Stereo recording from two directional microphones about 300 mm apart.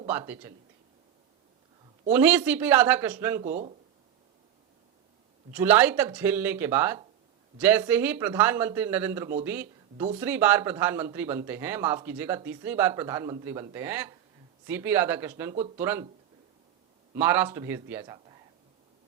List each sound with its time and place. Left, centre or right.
0.0 s speech: centre
2.1 s speech: centre
3.4 s speech: right
5.5 s speech: centre
17.2 s speech: centre